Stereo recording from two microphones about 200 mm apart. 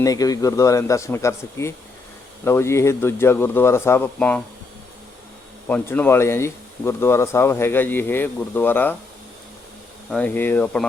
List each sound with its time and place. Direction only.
0.0 s speech: 20° left (ahead or behind)
5.6 s speech: 10° left (ahead or behind)
10.1 s speech: 5° left (ahead or behind)